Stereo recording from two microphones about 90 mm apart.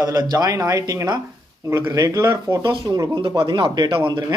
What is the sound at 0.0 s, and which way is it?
Speech, 40° right (ahead or behind).